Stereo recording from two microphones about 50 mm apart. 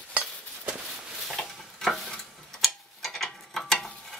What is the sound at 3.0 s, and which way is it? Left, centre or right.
Ratchet, centre.